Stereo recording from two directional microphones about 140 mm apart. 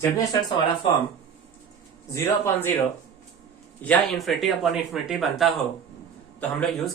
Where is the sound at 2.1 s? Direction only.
15° left (ahead or behind).